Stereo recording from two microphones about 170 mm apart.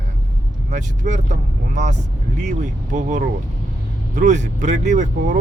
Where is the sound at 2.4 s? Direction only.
45° right (ahead or behind).